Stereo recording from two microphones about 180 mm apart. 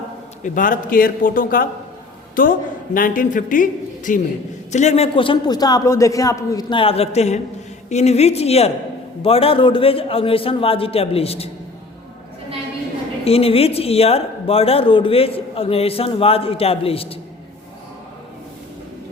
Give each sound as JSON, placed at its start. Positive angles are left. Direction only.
{"t": 0.4, "sound": "a man's voice", "side_deg": 50}
{"t": 13.2, "sound": "speech", "side_deg": 35}